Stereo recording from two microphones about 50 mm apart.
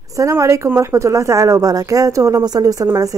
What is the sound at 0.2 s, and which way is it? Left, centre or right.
A woman's voice, right.